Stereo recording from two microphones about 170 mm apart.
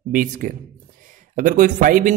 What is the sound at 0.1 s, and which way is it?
Speech, 50° right (ahead or behind).